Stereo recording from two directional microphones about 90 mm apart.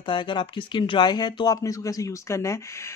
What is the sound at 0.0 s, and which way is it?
Speech, 60° left (ahead or behind).